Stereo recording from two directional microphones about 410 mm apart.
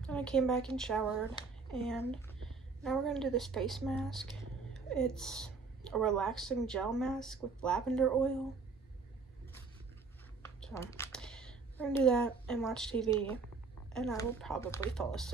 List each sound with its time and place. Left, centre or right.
0.0 s a woman's voice: centre
10.4 s a woman's voice: centre